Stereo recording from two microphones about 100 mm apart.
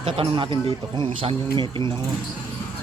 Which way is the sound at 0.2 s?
65° right (ahead or behind).